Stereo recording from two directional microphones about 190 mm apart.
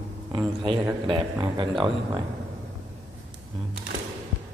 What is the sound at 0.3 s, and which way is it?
A man's voice, 25° right (ahead or behind).